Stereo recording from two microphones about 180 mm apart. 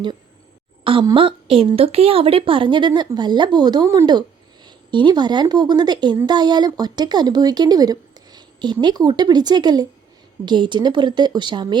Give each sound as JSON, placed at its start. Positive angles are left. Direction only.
{"t": 0.9, "sound": "speech", "side_deg": -30}